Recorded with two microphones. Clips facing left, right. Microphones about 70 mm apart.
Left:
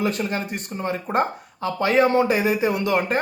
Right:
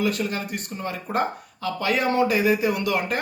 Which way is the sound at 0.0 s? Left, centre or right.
Left.